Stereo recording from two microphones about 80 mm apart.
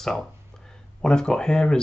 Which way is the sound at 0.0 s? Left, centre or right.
Centre.